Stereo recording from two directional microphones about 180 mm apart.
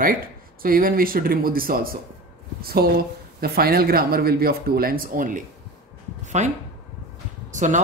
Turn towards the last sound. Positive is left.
turn(degrees=-45)  # may be behind; listen again after turning